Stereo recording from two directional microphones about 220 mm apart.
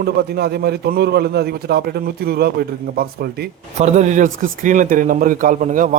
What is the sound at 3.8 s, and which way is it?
A man's voice, 30° right (ahead or behind).